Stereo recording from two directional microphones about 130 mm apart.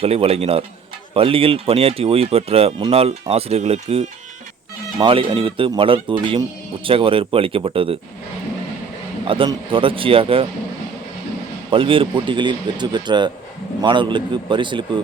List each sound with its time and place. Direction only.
0.0 s speech: 50° right (ahead or behind)
4.9 s speech: 40° right (ahead or behind)
9.2 s speech: 40° right (ahead or behind)
11.7 s speech: 45° right (ahead or behind)